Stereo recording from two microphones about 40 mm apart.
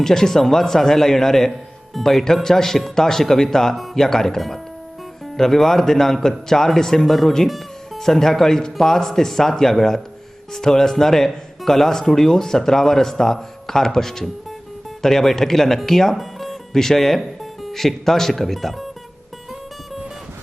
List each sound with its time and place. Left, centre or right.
0.0 s speech: centre